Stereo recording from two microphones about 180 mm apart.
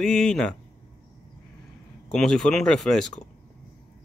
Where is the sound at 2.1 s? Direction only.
5° left (ahead or behind).